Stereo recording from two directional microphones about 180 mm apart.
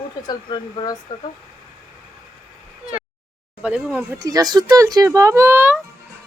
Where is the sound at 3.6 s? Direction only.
10° right (ahead or behind).